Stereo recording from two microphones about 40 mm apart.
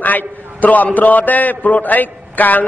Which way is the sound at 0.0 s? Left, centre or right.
Left.